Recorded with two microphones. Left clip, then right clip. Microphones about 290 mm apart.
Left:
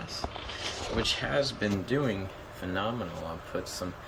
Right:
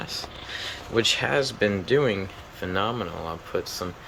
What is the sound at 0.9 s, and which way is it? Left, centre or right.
Speech, right.